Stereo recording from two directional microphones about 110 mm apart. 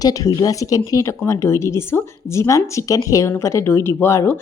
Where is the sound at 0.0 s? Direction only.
30° left (ahead or behind).